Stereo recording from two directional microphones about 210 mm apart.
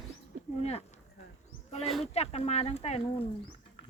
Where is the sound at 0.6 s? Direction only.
30° left (ahead or behind).